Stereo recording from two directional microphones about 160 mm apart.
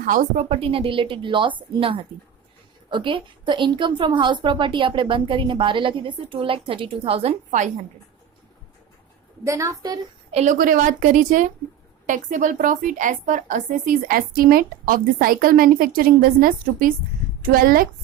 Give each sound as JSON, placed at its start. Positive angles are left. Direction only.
{"t": 0.0, "sound": "a woman's voice", "side_deg": -55}
{"t": 2.9, "sound": "a woman's voice", "side_deg": -30}
{"t": 9.4, "sound": "a woman's voice", "side_deg": -20}
{"t": 10.3, "sound": "a woman's voice", "side_deg": -50}